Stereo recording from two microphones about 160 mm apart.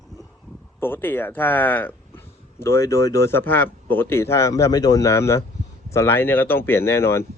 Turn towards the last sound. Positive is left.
turn(degrees=15)  # may be behind; listen again after turning